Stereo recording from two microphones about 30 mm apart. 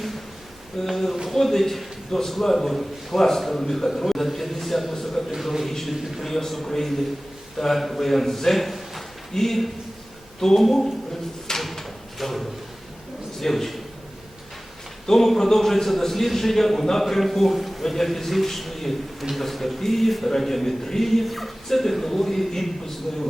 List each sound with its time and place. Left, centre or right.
0.9 s a man's voice: centre
6.2 s a man's voice: centre
11.6 s drawer open or close: centre
13.4 s a man's voice: centre
15.0 s a man's voice: centre